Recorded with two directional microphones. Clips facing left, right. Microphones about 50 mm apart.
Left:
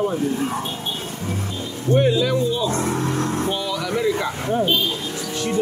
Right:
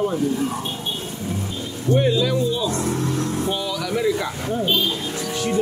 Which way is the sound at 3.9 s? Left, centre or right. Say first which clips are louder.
Even; left.